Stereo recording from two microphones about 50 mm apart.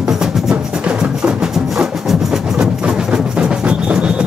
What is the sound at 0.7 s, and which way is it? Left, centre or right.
Music, right.